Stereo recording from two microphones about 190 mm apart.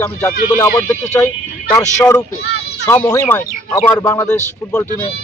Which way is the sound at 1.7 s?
5° left (ahead or behind).